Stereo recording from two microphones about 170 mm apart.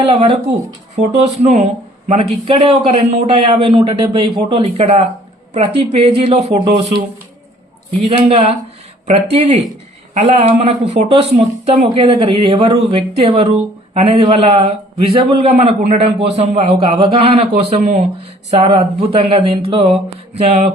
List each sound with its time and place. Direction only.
0.0 s speech: 35° right (ahead or behind)
8.0 s speech: 35° right (ahead or behind)